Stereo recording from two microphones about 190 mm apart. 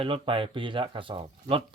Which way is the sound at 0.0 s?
30° right (ahead or behind).